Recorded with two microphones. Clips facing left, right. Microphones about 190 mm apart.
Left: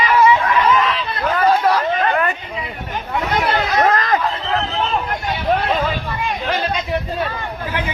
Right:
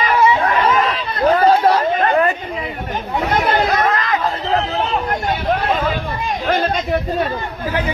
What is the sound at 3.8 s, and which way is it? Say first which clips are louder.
Chatter: left 2 dB; 40° left (ahead or behind).